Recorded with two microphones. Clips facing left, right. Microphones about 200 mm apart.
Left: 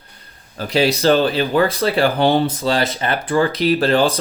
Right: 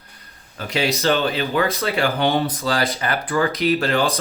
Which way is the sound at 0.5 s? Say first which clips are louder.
Left 5 dB; 35° left (ahead or behind).